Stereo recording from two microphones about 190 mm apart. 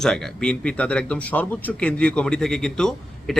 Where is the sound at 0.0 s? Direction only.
5° left (ahead or behind).